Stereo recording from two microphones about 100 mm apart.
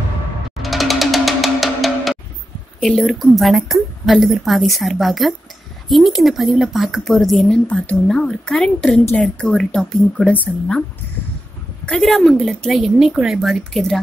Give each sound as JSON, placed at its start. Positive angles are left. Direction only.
{"t": 0.6, "sound": "music", "side_deg": 0}
{"t": 2.8, "sound": "a woman's voice", "side_deg": 0}
{"t": 11.8, "sound": "a woman's voice", "side_deg": 5}